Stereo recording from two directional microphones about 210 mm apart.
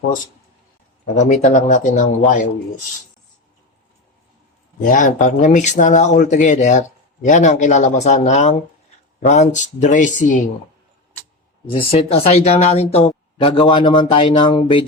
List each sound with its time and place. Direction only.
1.1 s speech: 35° left (ahead or behind)
4.8 s speech: 40° left (ahead or behind)
11.6 s speech: 25° left (ahead or behind)